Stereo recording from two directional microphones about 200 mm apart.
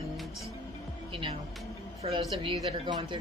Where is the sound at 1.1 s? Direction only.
25° right (ahead or behind).